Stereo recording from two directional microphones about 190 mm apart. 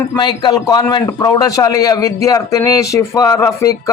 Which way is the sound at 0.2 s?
20° left (ahead or behind).